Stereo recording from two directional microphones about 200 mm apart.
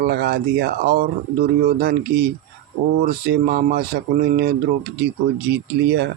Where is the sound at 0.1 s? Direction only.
55° right (ahead or behind).